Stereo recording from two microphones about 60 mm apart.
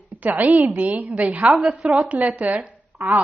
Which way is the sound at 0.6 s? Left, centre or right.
Right.